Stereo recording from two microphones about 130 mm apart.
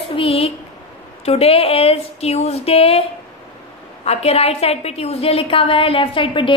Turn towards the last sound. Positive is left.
turn(degrees=40)  # may be behind; listen again after turning